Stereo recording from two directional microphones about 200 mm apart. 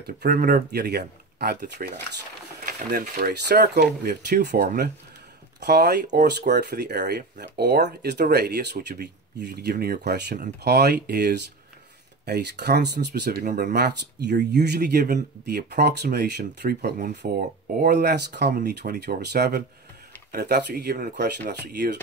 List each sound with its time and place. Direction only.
0.0 s speech: 50° right (ahead or behind)
13.7 s speech: 55° right (ahead or behind)